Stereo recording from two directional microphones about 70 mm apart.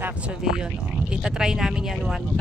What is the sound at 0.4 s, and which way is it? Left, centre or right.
Speech, centre.